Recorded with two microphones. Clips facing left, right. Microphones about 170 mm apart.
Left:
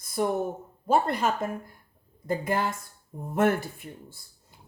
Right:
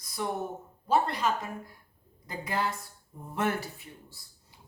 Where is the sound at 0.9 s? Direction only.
50° left (ahead or behind).